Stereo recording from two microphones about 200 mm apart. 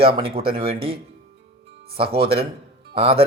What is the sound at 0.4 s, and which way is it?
Speech, 30° right (ahead or behind).